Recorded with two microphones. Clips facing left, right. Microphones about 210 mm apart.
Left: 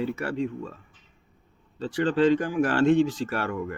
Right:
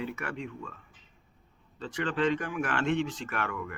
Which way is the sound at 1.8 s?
35° left (ahead or behind).